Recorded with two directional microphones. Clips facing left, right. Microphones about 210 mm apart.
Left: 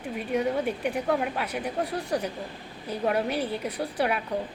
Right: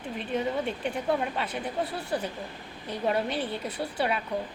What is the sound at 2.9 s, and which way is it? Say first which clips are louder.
Speech: left 2 dB; 10° left (ahead or behind).